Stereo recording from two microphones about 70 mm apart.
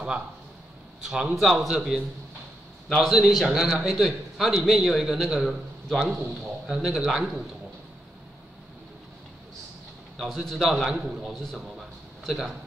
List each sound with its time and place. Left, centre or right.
1.0 s a man's voice: centre
10.1 s a man's voice: centre